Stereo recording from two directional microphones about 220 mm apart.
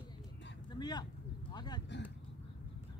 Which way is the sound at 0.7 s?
20° left (ahead or behind).